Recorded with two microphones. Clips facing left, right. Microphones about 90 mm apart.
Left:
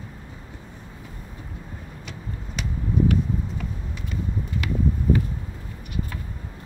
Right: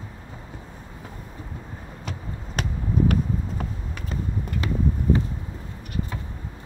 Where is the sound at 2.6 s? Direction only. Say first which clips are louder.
Even; 45° right (ahead or behind).